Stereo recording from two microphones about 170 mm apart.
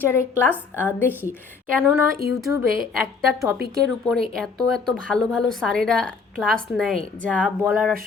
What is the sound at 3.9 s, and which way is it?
A woman's voice, centre (ahead or behind).